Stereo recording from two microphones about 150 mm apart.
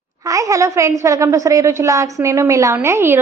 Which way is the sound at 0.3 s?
20° right (ahead or behind).